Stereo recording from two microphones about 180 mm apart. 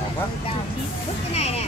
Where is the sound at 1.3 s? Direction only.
35° left (ahead or behind).